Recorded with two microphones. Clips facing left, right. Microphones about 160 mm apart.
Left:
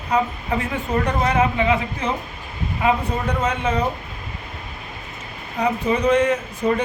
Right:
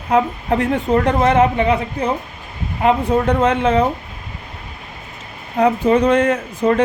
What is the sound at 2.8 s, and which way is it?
A woman's voice, 60° right (ahead or behind).